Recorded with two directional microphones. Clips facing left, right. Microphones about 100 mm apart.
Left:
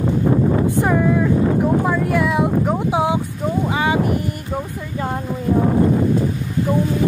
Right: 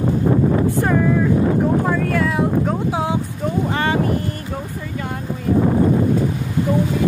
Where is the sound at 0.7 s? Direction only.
20° left (ahead or behind).